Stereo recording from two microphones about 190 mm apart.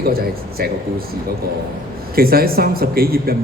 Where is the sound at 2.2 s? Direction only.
55° right (ahead or behind).